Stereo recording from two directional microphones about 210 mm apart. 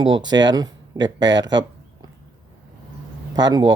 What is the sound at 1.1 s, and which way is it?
Speech, 60° right (ahead or behind).